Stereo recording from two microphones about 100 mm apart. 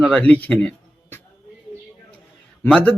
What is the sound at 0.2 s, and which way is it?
Speech, 15° left (ahead or behind).